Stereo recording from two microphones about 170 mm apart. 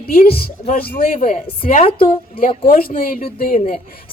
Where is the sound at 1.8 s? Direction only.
30° left (ahead or behind).